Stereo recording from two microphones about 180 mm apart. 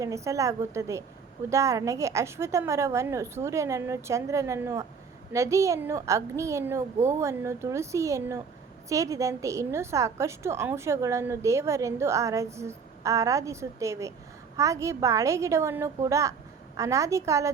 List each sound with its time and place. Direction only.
0.0 s a woman's voice: 15° right (ahead or behind)